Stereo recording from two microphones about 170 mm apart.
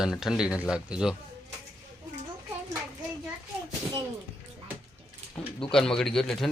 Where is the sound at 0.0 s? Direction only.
Centre (ahead or behind).